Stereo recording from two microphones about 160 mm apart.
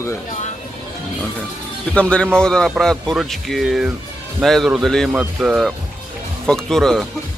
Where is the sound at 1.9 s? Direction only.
5° left (ahead or behind).